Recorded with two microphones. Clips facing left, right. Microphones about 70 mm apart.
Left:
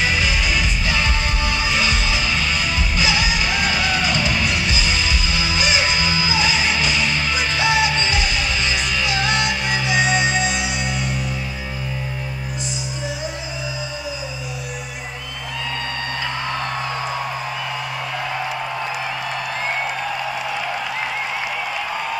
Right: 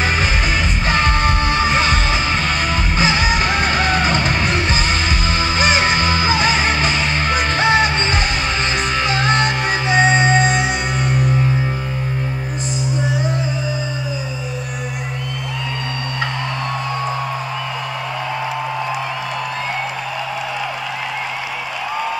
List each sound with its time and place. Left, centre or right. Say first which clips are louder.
0.0 s music: right 2 dB; right